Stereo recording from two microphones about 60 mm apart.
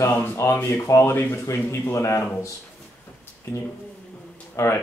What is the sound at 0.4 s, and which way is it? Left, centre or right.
Speech, left.